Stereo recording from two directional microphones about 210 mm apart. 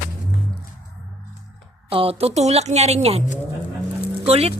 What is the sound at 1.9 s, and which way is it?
Speech, 25° right (ahead or behind).